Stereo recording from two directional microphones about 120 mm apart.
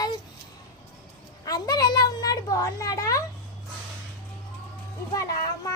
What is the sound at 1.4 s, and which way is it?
A woman's voice, 30° left (ahead or behind).